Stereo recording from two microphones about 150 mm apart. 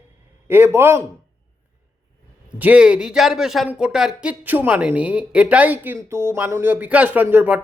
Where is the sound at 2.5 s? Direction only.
10° right (ahead or behind).